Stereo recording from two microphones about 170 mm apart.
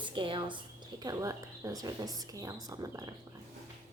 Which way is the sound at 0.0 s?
30° right (ahead or behind).